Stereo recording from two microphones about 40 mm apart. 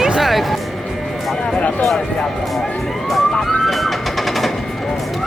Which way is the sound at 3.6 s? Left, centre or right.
Centre.